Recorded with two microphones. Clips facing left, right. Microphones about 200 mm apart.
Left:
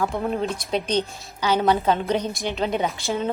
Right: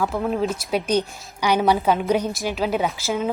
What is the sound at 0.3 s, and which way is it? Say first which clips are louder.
A woman's voice: right 2 dB; centre (ahead or behind).